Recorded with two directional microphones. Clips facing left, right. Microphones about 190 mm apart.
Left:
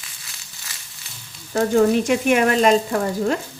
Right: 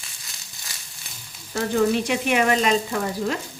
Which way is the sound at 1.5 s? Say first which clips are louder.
Left 5 dB; 50° left (ahead or behind).